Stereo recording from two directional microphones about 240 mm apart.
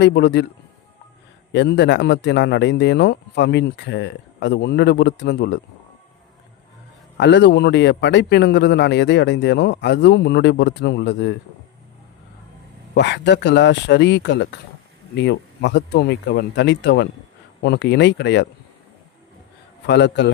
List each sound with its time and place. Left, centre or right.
0.0 s a man's voice: left
1.5 s a man's voice: left
7.2 s a man's voice: left
12.9 s a man's voice: left
19.9 s a man's voice: left